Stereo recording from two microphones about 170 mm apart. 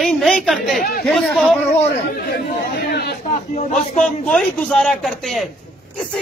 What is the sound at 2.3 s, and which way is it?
Chatter, 70° left (ahead or behind).